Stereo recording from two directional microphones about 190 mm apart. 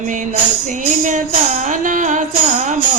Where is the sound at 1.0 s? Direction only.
40° right (ahead or behind).